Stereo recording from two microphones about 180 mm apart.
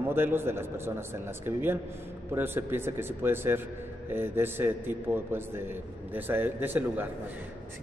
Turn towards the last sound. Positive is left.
turn(degrees=-10)  # may be behind; listen again after turning